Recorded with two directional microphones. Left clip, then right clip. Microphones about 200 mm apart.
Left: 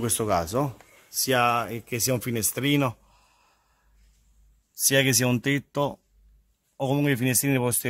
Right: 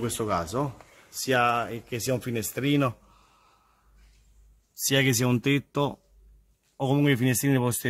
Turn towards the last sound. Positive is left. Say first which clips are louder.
# left 1 dB
turn(degrees=10)  # may be behind; listen again after turning